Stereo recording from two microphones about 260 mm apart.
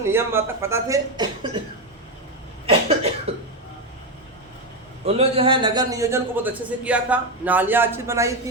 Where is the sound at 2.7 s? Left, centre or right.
Right.